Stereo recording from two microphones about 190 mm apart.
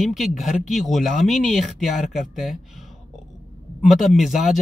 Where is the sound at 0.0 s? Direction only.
Centre (ahead or behind).